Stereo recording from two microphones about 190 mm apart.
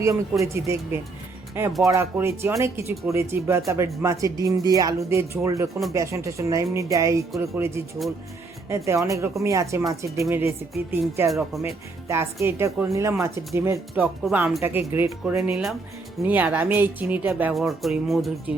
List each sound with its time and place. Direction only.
0.0 s speech: 15° right (ahead or behind)
8.7 s speech: 15° right (ahead or behind)
11.3 s speech: centre (ahead or behind)
12.0 s speech: 15° right (ahead or behind)